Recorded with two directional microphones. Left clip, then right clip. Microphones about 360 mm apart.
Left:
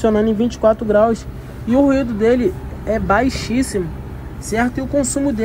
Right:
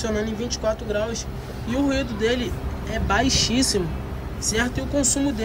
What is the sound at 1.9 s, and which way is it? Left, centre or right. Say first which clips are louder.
Speech: left 8 dB; centre.